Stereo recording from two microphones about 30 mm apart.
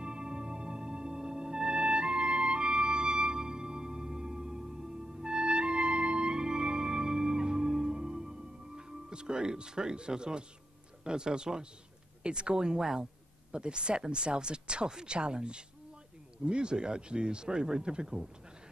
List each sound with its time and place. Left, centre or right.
0.0 s music: right
11.1 s speech: right
13.5 s speech: right